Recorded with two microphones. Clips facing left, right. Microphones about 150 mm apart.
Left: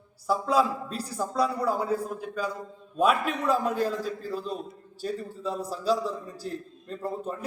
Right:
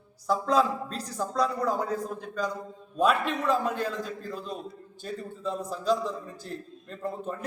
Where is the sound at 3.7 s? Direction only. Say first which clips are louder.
Left 4 dB; 40° left (ahead or behind).